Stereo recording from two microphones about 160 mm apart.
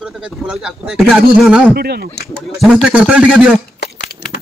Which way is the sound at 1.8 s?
75° right (ahead or behind).